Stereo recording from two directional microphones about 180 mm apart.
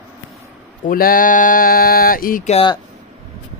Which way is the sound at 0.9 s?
55° left (ahead or behind).